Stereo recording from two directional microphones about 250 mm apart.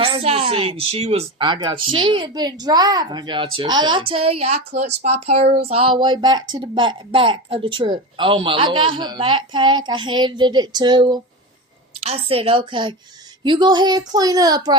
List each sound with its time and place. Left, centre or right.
0.0 s a woman's voice: right